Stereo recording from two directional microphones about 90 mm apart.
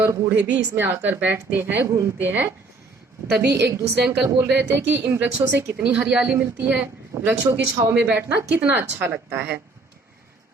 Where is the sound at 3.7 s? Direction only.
30° right (ahead or behind).